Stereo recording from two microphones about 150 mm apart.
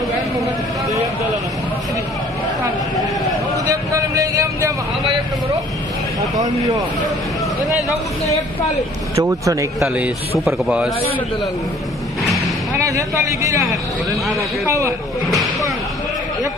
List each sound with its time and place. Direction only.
3.7 s vehicle: 20° right (ahead or behind)
6.3 s speech: 25° right (ahead or behind)
9.2 s speech: 20° right (ahead or behind)
9.8 s speech: 10° right (ahead or behind)
12.7 s speech: 20° right (ahead or behind)
14.7 s speech: 20° right (ahead or behind)